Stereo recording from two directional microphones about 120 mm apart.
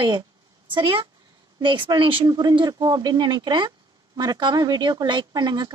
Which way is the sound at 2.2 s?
35° right (ahead or behind).